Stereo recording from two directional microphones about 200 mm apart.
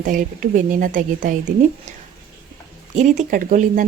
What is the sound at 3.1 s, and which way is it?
Speech, 40° right (ahead or behind).